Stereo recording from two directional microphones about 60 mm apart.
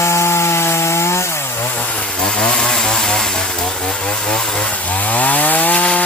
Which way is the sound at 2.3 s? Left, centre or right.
Centre.